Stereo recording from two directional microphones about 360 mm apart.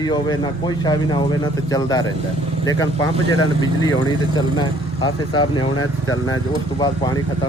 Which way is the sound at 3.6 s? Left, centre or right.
Centre.